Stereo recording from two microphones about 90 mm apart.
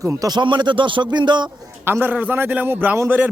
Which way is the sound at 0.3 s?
55° right (ahead or behind).